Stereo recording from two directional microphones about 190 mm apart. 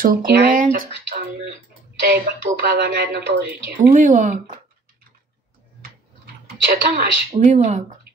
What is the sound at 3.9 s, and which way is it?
Speech, 40° right (ahead or behind).